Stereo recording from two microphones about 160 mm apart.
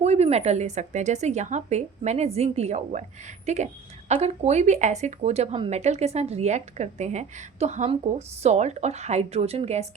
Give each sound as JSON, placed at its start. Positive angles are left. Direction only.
{"t": 0.0, "sound": "speech", "side_deg": -45}